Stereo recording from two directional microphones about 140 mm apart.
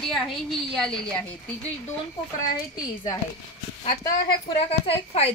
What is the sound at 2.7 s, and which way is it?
Speech, 25° left (ahead or behind).